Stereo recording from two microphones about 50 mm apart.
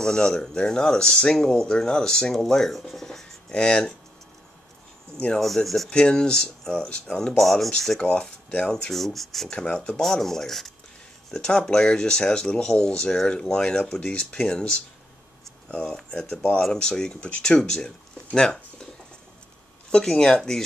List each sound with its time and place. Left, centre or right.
0.0 s speech: centre
5.4 s speech: centre
5.9 s speech: centre
7.3 s speech: centre
8.0 s speech: centre
8.9 s speech: centre
9.5 s speech: centre
10.0 s speech: centre
20.1 s speech: centre